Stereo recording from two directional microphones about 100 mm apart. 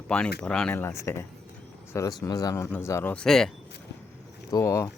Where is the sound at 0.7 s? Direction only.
25° left (ahead or behind).